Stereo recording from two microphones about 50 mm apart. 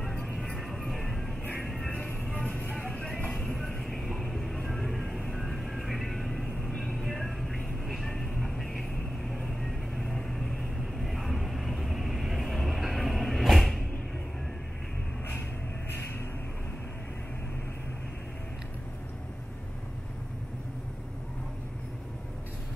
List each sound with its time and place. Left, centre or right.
0.0 s music: centre
1.4 s music: left
2.2 s music: centre
3.3 s vehicle: centre